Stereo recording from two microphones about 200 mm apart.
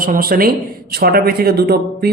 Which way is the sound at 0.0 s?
45° right (ahead or behind).